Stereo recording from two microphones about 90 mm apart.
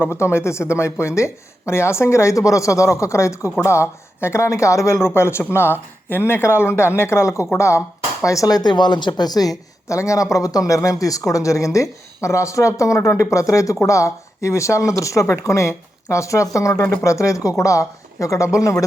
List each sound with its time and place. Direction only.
0.0 s a woman's voice: 30° left (ahead or behind)